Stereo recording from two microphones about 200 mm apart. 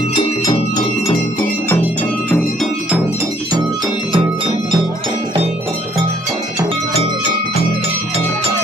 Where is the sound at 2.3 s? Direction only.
Centre (ahead or behind).